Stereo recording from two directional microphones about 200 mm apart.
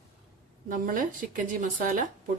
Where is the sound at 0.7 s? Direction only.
45° right (ahead or behind).